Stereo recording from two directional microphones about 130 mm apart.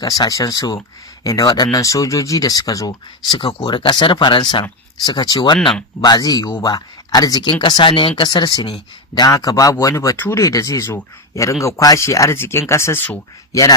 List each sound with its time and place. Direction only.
0.0 s speech: 30° left (ahead or behind)
3.2 s speech: 40° left (ahead or behind)
9.2 s speech: 30° left (ahead or behind)